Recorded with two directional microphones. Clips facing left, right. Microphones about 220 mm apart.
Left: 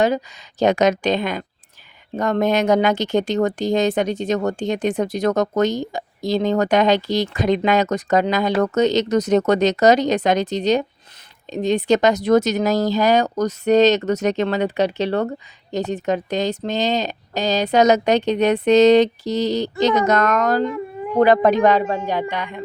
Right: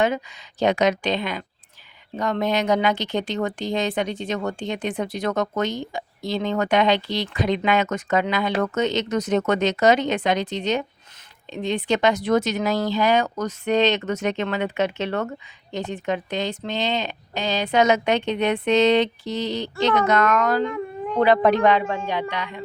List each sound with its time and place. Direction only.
0.0 s speech: 40° left (ahead or behind)
20.7 s a sound: 5° left (ahead or behind)
21.2 s speech: 45° left (ahead or behind)